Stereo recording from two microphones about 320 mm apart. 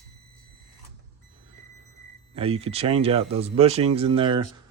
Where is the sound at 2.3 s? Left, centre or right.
Centre.